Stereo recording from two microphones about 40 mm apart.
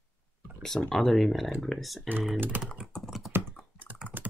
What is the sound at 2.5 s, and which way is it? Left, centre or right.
Speech, right.